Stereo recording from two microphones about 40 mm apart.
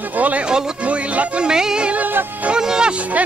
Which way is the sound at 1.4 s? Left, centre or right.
Centre.